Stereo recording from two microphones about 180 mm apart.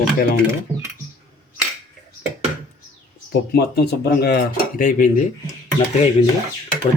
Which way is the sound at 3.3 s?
65° left (ahead or behind).